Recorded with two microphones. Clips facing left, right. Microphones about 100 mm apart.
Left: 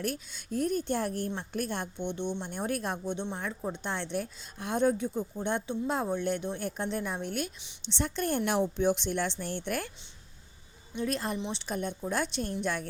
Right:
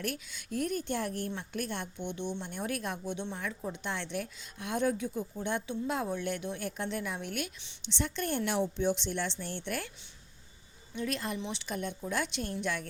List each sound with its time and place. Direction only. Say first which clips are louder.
0.0 s a woman's voice: left 3 dB; 35° left (ahead or behind)
10.9 s a woman's voice: left 3 dB; 35° left (ahead or behind)